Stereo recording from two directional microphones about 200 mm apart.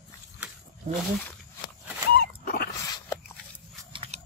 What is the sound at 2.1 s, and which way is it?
Dog, 50° left (ahead or behind).